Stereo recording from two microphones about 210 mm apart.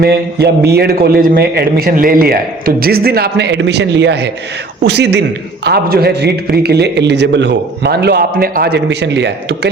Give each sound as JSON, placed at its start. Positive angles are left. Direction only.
{"t": 0.0, "sound": "a man's voice", "side_deg": -50}